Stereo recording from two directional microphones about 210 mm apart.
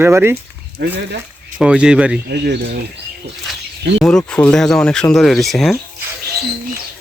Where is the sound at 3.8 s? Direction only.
55° right (ahead or behind).